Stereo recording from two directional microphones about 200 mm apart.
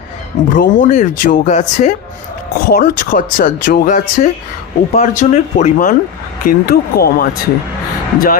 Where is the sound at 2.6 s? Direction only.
50° left (ahead or behind).